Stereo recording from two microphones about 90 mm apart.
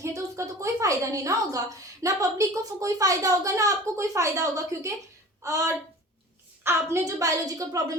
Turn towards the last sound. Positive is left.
turn(degrees=-40)  # may be behind; listen again after turning